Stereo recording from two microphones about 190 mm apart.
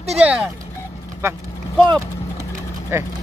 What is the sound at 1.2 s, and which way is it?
Speech, 15° right (ahead or behind).